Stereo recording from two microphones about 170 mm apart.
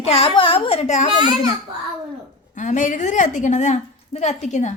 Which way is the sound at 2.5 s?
45° left (ahead or behind).